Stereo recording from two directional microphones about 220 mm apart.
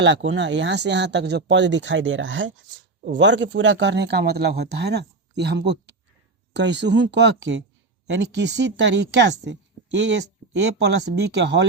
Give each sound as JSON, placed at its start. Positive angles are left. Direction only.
{"t": 0.0, "sound": "speech", "side_deg": -55}